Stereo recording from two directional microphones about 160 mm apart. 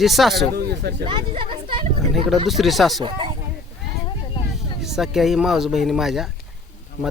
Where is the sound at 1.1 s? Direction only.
30° right (ahead or behind).